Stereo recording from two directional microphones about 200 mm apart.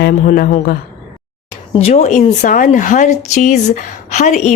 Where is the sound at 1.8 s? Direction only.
35° left (ahead or behind).